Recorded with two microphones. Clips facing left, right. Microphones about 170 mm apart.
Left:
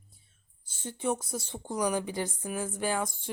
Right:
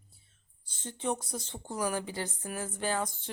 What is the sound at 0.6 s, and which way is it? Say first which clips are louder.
Speech: left 2 dB; 10° left (ahead or behind).